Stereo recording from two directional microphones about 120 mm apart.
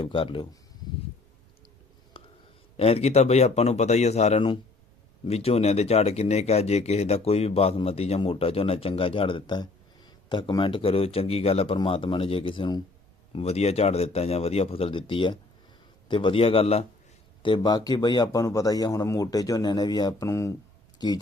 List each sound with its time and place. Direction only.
0.0 s speech: 45° left (ahead or behind)
2.1 s whispering: 45° left (ahead or behind)
2.7 s speech: 55° left (ahead or behind)
13.3 s speech: 60° left (ahead or behind)
17.4 s a man's voice: 40° left (ahead or behind); by 20.6 s 25° left (ahead or behind)